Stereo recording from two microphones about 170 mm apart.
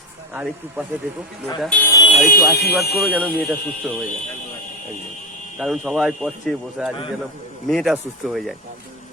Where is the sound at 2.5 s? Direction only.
70° left (ahead or behind).